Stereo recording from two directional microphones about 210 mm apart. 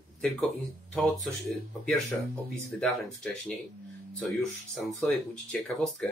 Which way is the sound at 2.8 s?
Centre (ahead or behind).